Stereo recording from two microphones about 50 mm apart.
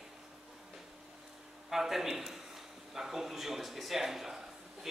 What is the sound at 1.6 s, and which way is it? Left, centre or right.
Speech, centre.